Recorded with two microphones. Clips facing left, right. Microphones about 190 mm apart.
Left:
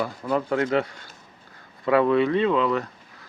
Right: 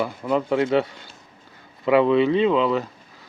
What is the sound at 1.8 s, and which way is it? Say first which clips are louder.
Speech: right 2 dB; 20° right (ahead or behind).